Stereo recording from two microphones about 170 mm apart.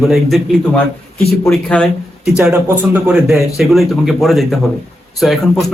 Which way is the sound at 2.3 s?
5° right (ahead or behind).